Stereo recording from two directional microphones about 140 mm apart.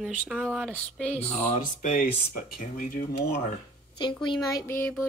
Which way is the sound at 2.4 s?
90° left.